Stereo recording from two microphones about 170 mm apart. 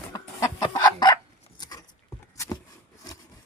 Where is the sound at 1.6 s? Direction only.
20° left (ahead or behind).